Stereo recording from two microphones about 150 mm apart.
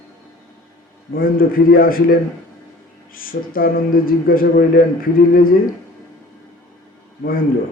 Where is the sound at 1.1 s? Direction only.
75° left (ahead or behind).